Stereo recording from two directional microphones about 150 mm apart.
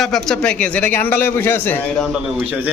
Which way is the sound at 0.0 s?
5° left (ahead or behind).